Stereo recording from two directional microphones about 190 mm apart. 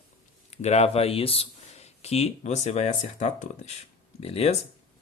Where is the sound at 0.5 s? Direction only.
35° left (ahead or behind).